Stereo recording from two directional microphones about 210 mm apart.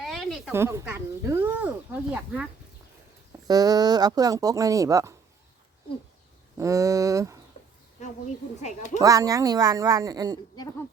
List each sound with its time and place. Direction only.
0.0 s a sound: centre (ahead or behind)
0.5 s speech: 15° right (ahead or behind)
3.4 s speech: 20° right (ahead or behind)
6.6 s speech: 15° right (ahead or behind)
8.0 s speech: 35° left (ahead or behind)
9.0 s speech: 15° right (ahead or behind)